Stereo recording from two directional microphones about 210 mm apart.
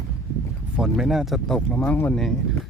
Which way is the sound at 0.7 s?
5° right (ahead or behind).